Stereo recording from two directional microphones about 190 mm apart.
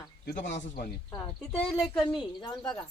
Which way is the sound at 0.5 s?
40° left (ahead or behind).